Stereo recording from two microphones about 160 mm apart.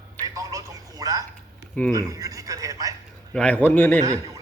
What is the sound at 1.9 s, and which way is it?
A man's voice, 20° right (ahead or behind).